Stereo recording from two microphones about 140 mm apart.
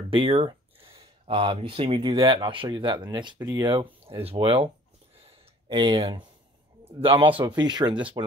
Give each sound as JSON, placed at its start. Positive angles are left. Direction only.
{"t": 0.1, "sound": "speech", "side_deg": -40}
{"t": 5.2, "sound": "a sound", "side_deg": -40}
{"t": 6.8, "sound": "speech", "side_deg": -40}